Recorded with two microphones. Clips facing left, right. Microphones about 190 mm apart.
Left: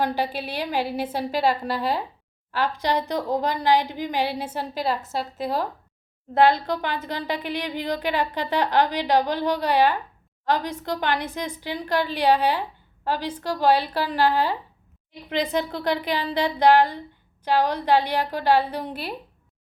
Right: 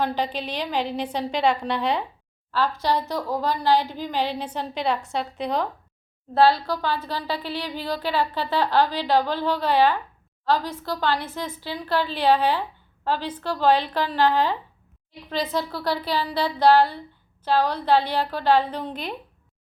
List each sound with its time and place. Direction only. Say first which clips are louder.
0.0 s a woman's voice: even; 10° left (ahead or behind)
2.5 s a woman's voice: right 1 dB; 15° left (ahead or behind)
6.3 s a woman's voice: even; 20° left (ahead or behind)